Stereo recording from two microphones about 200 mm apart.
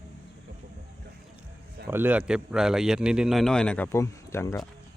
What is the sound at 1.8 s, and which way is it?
A man's voice, 10° right (ahead or behind).